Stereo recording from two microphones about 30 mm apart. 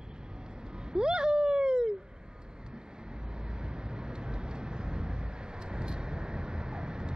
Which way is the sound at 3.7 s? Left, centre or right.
Right.